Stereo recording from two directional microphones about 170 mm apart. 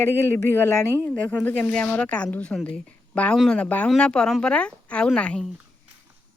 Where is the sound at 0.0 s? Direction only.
15° left (ahead or behind).